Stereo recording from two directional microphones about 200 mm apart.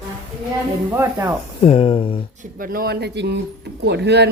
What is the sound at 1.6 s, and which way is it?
Speech, 30° left (ahead or behind).